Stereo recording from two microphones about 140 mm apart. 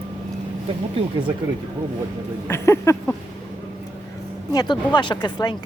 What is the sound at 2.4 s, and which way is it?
Speech, 20° left (ahead or behind).